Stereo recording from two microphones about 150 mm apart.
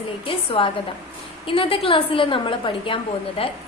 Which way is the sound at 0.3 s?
35° left (ahead or behind).